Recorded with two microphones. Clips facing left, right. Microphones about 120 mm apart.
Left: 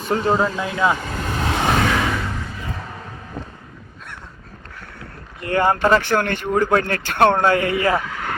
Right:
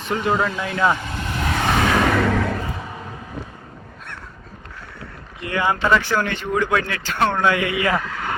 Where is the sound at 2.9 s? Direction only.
15° right (ahead or behind).